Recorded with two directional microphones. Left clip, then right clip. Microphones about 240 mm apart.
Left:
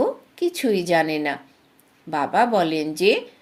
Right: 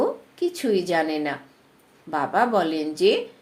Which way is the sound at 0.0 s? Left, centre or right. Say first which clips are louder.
Left 2 dB; left.